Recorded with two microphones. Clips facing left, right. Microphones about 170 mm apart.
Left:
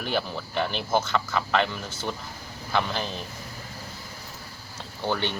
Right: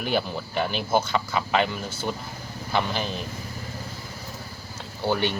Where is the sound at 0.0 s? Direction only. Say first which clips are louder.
Right 2 dB; 10° right (ahead or behind).